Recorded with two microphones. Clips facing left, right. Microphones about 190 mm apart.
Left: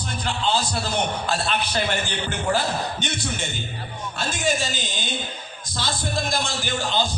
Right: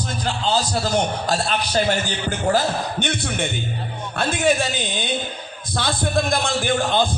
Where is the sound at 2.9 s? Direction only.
60° right (ahead or behind).